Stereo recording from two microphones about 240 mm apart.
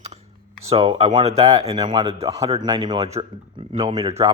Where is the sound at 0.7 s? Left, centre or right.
Right.